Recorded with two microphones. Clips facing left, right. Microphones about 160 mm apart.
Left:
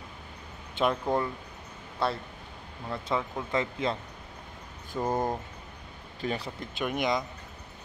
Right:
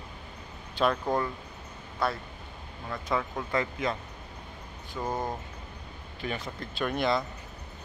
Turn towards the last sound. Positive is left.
turn(degrees=15)  # may be behind; listen again after turning